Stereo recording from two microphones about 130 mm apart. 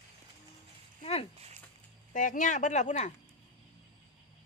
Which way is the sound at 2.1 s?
85° left.